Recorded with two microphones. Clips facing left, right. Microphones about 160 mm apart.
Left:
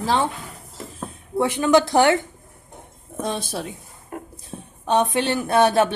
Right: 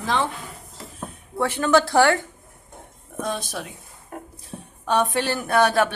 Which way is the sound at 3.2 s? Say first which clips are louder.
Left 2 dB; 30° left (ahead or behind).